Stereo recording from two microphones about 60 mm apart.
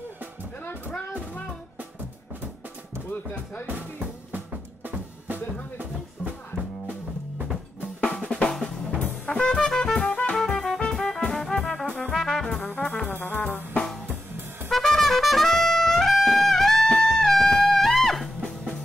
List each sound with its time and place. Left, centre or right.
0.7 s a sound: left
4.3 s music: right
8.0 s drum: centre
8.5 s drum kit: centre
9.2 s brass instrument: centre
10.3 s music: centre
11.5 s brass instrument: centre
12.1 s trombone: centre
12.6 s trombone: centre
13.1 s trombone: left
14.7 s trumpet: centre